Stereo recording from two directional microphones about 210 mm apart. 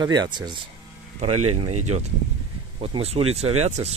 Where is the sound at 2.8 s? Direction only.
25° right (ahead or behind).